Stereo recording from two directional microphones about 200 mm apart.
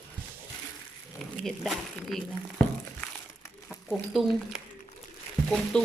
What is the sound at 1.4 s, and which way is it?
Speech, centre (ahead or behind).